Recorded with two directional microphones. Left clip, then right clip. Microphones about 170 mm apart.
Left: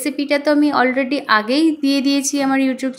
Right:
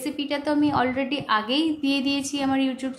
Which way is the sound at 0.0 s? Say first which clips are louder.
Left 9 dB; 30° left (ahead or behind).